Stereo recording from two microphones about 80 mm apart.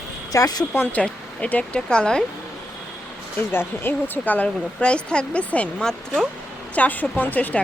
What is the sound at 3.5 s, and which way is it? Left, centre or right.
Speech, left.